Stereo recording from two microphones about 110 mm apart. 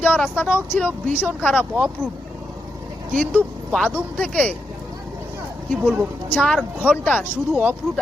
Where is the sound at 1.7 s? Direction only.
10° right (ahead or behind).